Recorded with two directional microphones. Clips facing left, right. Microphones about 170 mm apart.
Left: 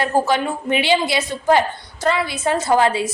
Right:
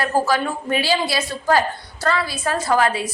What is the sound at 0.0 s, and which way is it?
A woman's voice, 20° left (ahead or behind).